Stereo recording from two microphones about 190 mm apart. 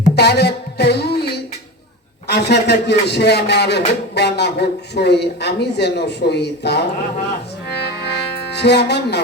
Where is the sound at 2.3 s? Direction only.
60° left (ahead or behind).